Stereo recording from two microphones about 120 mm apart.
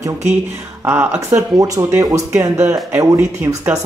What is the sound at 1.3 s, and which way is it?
Speech, 30° right (ahead or behind).